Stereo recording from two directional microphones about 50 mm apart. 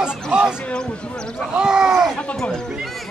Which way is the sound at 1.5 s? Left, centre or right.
Centre.